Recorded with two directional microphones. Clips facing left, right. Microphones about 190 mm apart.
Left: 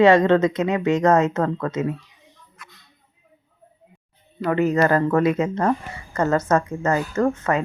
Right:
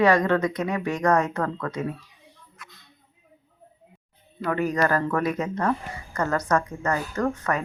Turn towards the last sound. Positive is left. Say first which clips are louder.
# left 5 dB
turn(degrees=25)  # may be behind; listen again after turning